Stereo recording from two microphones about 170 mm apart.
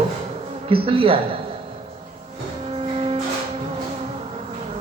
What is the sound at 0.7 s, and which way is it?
Speech, 35° right (ahead or behind).